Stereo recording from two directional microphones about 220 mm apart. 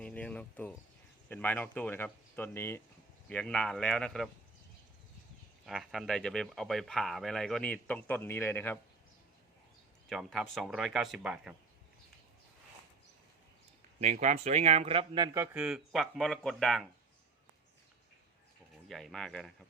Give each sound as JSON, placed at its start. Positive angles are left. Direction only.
{"t": 0.0, "sound": "speech", "side_deg": 5}
{"t": 5.6, "sound": "speech", "side_deg": 0}
{"t": 10.1, "sound": "speech", "side_deg": 0}
{"t": 14.0, "sound": "a man's voice", "side_deg": -35}
{"t": 15.5, "sound": "speech", "side_deg": -5}
{"t": 18.9, "sound": "speech", "side_deg": 0}